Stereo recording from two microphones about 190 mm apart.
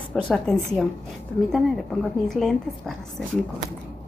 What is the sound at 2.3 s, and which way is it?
A woman's voice, centre (ahead or behind).